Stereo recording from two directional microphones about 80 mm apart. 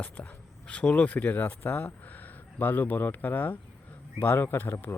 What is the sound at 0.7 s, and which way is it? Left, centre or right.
Speech, centre.